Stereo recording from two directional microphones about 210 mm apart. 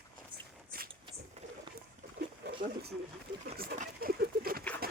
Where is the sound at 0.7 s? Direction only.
45° right (ahead or behind).